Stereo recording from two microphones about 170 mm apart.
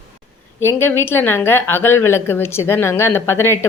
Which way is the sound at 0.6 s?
15° left (ahead or behind).